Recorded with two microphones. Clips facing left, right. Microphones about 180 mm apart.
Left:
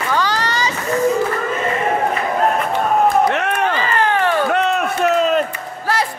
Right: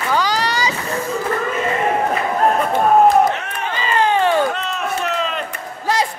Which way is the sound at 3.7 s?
15° right (ahead or behind).